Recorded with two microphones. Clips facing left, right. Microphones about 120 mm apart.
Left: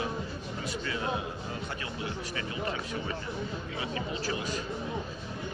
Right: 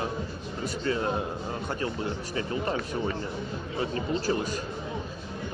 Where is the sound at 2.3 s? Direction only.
40° right (ahead or behind).